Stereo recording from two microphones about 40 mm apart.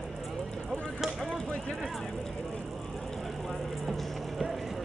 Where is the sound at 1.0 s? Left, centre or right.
Centre.